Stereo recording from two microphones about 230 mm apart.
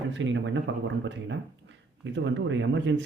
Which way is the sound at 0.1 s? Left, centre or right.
Right.